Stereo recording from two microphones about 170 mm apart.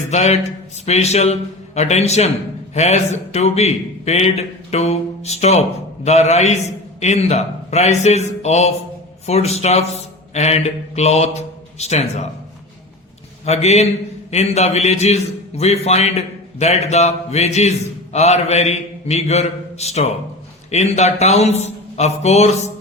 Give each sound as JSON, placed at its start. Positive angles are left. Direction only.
{"t": 0.1, "sound": "a man's voice", "side_deg": 40}
{"t": 10.0, "sound": "mantra", "side_deg": 40}
{"t": 13.4, "sound": "a man's voice", "side_deg": 40}